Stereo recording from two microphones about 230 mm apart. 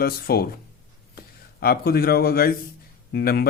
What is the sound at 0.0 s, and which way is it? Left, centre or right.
Speech, left.